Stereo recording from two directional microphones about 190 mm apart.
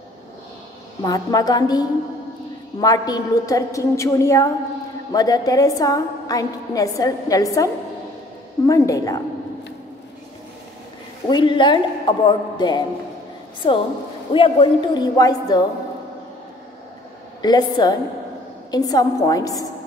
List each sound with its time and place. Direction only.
1.0 s a woman's voice: 20° left (ahead or behind)
11.2 s a woman's voice: 25° left (ahead or behind)
17.4 s a woman's voice: 20° left (ahead or behind)